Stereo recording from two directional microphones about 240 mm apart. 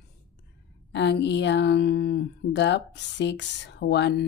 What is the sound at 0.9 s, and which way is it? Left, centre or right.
A woman's voice, left.